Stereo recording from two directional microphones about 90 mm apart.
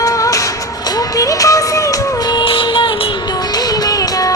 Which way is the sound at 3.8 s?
40° left (ahead or behind).